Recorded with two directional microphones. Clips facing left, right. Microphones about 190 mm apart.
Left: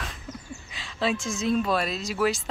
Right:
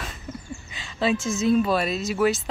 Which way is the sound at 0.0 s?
5° right (ahead or behind).